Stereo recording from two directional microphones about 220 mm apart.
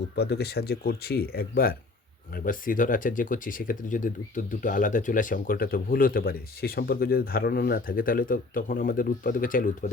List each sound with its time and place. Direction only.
0.2 s speech: 45° left (ahead or behind)